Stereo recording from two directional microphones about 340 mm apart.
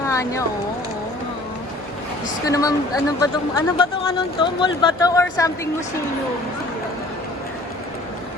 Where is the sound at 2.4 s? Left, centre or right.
Centre.